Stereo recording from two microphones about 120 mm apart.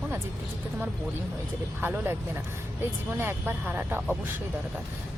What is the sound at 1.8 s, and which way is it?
Speech, 15° right (ahead or behind).